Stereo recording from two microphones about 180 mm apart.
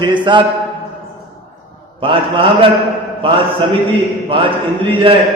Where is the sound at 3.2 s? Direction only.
30° right (ahead or behind).